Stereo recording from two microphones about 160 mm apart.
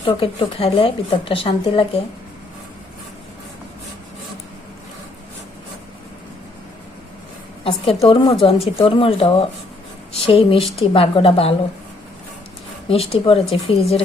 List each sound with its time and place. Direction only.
0.0 s a woman's voice: 35° left (ahead or behind)
7.6 s a woman's voice: 35° left (ahead or behind)
12.9 s a woman's voice: 35° left (ahead or behind)